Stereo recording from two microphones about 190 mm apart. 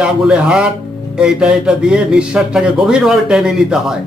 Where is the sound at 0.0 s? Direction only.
5° right (ahead or behind).